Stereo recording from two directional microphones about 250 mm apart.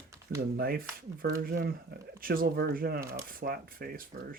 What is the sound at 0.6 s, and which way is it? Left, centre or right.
Speech, right.